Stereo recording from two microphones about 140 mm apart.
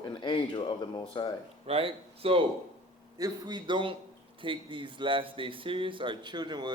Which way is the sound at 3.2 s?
30° right (ahead or behind).